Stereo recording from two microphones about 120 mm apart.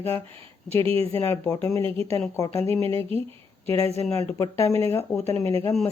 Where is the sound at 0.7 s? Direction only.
50° right (ahead or behind).